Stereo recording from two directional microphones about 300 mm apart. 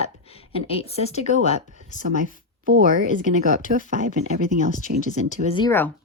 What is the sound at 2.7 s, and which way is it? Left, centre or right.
Speech, right.